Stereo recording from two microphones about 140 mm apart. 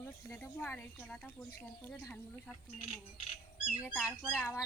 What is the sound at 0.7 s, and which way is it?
A woman's voice, 10° left (ahead or behind).